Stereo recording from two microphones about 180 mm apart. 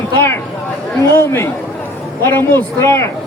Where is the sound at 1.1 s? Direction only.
15° left (ahead or behind).